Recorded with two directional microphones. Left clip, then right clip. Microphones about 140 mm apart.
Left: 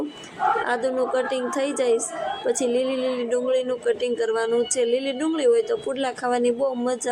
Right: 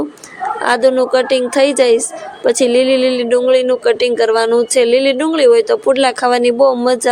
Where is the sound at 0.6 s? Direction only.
25° right (ahead or behind).